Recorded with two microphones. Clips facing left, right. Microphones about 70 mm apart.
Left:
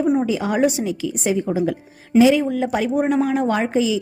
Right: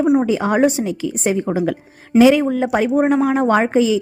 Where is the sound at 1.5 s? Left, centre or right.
Right.